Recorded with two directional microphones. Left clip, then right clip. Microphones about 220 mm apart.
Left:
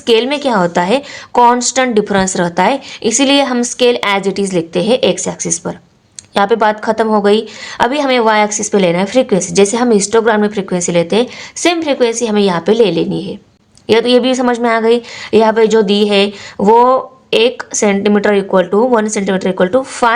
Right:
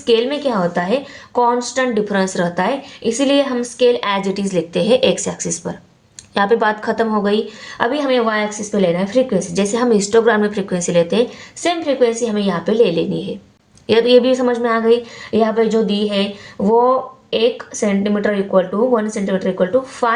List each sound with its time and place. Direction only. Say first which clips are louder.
0.0 s a woman's voice: left 4 dB; 35° left (ahead or behind)